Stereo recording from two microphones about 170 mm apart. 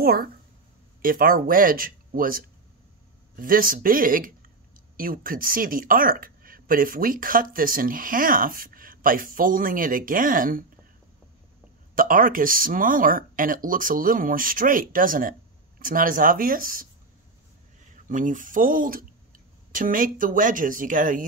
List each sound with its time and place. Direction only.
0.0 s speech: 60° right (ahead or behind)
11.9 s speech: 55° right (ahead or behind)
18.0 s speech: 50° right (ahead or behind)